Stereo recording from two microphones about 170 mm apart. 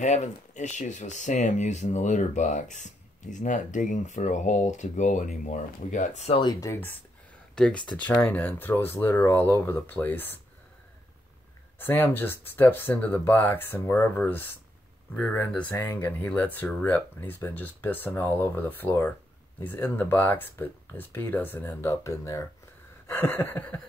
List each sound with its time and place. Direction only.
0.0 s speech: 45° left (ahead or behind)
6.4 s speech: 20° left (ahead or behind)
11.8 s speech: 10° left (ahead or behind)